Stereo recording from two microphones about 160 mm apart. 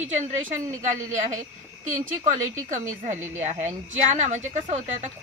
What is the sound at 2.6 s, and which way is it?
Speech, 50° right (ahead or behind).